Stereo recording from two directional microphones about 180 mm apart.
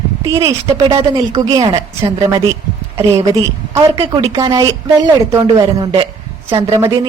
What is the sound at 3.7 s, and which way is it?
A man's voice, 15° right (ahead or behind).